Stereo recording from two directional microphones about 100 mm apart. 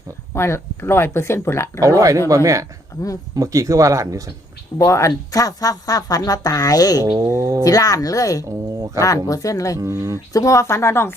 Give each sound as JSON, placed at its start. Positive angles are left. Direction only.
{"t": 0.3, "sound": "speech", "side_deg": 25}
{"t": 1.8, "sound": "speech", "side_deg": -35}
{"t": 4.8, "sound": "speech", "side_deg": 30}
{"t": 7.2, "sound": "speech", "side_deg": -30}
{"t": 7.6, "sound": "speech", "side_deg": 35}
{"t": 9.7, "sound": "speech", "side_deg": -25}
{"t": 10.3, "sound": "speech", "side_deg": 30}